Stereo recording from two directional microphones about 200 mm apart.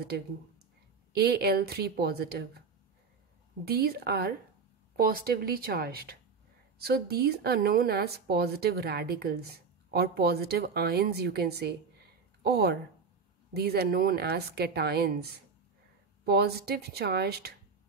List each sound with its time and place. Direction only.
1.1 s speech: 55° right (ahead or behind)
3.6 s speech: 50° right (ahead or behind)
16.3 s speech: 55° right (ahead or behind)